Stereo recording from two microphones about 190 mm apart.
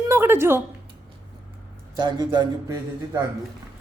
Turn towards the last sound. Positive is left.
turn(degrees=-15)  # may be behind; listen again after turning